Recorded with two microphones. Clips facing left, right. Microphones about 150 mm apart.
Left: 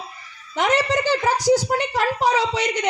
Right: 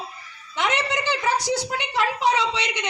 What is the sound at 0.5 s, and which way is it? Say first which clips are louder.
A woman's voice: left 5 dB; 35° left (ahead or behind).